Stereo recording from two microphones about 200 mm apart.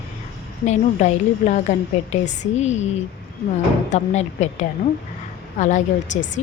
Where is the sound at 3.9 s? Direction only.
35° left (ahead or behind).